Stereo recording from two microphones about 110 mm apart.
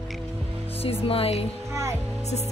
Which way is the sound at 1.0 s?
60° left (ahead or behind).